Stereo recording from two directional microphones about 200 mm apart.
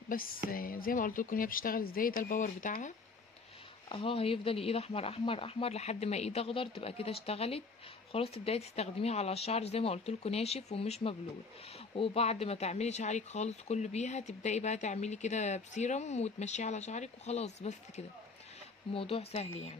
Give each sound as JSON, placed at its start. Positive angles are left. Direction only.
{"t": 0.1, "sound": "speech", "side_deg": 45}
{"t": 3.9, "sound": "speech", "side_deg": 25}